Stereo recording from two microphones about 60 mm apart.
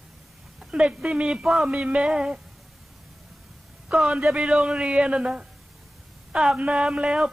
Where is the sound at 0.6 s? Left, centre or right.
Centre.